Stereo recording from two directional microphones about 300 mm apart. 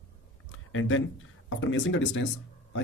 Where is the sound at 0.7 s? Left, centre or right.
Left.